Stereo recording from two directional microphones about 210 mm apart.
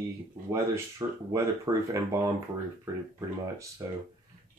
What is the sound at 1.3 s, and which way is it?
Speech, 15° right (ahead or behind).